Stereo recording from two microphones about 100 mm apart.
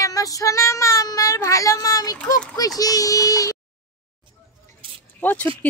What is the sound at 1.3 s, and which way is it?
Speech, 35° left (ahead or behind).